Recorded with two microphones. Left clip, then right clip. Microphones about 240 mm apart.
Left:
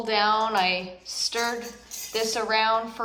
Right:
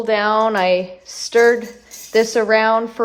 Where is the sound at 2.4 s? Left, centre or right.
Centre.